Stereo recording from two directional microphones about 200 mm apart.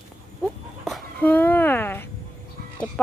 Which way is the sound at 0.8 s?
5° left (ahead or behind).